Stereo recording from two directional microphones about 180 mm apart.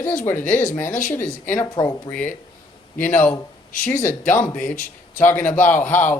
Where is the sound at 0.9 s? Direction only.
50° left (ahead or behind).